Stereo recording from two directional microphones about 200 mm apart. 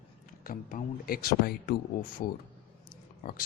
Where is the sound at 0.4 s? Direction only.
45° left (ahead or behind).